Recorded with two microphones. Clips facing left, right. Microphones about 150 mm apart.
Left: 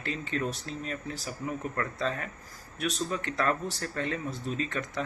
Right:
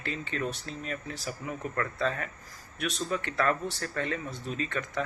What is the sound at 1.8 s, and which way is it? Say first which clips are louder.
Speech: right 3 dB; 35° left (ahead or behind).